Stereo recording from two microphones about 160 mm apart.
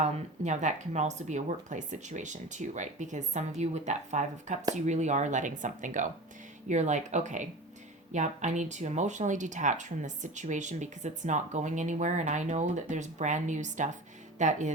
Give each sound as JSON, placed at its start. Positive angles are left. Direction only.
{"t": 0.0, "sound": "speech", "side_deg": -50}